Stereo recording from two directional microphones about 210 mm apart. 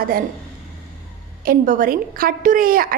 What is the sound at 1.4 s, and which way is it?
A woman's voice, 40° right (ahead or behind).